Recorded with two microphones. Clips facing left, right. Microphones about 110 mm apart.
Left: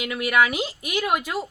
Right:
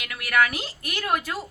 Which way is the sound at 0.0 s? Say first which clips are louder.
Left 2 dB; 20° left (ahead or behind).